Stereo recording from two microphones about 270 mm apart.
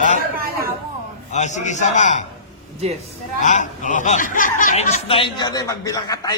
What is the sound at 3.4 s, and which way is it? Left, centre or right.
Speech, left.